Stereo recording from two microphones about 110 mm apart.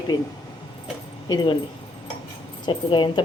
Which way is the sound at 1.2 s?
35° left (ahead or behind).